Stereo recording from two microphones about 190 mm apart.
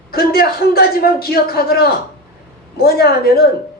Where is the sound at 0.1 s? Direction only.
55° left (ahead or behind).